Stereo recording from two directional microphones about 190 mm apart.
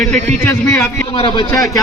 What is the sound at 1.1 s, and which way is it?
Speech, 25° left (ahead or behind).